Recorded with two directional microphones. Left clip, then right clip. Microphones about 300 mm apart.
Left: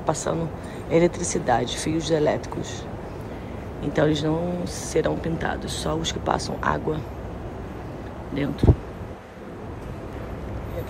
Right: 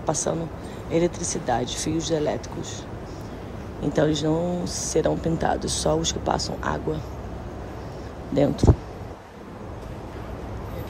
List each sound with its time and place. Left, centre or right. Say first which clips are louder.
0.0 s speech: left 1 dB; centre
3.9 s speech: even; centre
8.3 s speech: right 7 dB; centre